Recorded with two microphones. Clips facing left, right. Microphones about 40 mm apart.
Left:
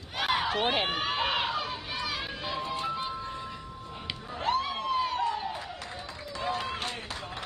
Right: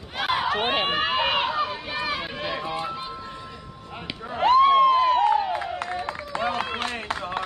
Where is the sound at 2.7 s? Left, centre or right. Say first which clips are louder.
Right 3 dB; centre.